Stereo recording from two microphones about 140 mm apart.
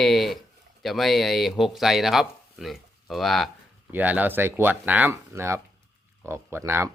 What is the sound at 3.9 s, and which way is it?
Speech, 10° right (ahead or behind).